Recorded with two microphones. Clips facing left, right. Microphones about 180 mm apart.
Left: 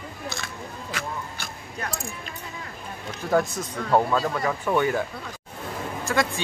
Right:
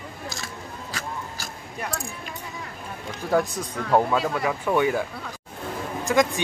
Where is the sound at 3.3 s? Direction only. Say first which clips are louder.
Even; 15° right (ahead or behind).